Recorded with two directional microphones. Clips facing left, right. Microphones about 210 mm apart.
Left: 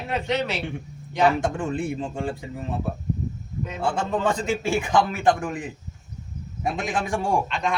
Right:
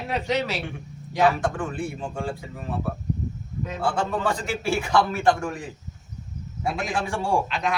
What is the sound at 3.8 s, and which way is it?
A man's voice, 20° left (ahead or behind).